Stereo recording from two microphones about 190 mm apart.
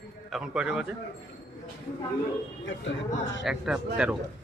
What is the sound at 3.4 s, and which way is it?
Speech, 5° right (ahead or behind).